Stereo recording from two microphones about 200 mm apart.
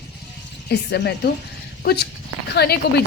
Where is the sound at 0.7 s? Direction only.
60° left (ahead or behind).